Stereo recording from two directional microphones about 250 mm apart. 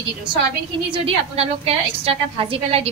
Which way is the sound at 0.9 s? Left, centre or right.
Right.